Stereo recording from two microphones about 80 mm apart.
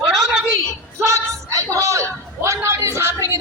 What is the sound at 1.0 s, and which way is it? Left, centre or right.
A man's voice, right.